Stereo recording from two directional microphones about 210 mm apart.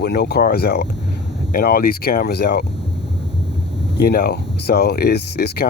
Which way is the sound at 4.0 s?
50° left (ahead or behind).